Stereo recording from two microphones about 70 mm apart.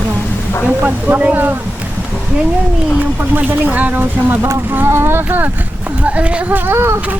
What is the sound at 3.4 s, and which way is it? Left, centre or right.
Speech, right.